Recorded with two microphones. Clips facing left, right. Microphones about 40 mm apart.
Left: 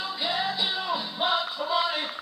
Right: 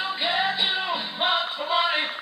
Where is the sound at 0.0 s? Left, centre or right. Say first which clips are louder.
Right 4 dB; right.